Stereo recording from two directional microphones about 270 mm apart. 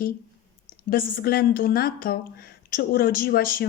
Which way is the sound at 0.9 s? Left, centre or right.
Left.